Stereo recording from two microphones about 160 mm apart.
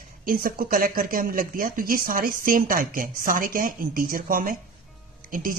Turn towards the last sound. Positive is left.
turn(degrees=-60)  # may be behind; listen again after turning